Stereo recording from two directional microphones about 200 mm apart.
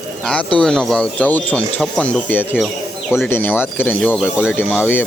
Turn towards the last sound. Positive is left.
turn(degrees=10)  # may be behind; listen again after turning